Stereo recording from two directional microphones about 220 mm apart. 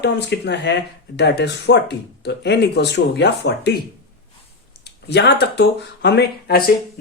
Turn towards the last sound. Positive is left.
turn(degrees=45)  # may be behind; listen again after turning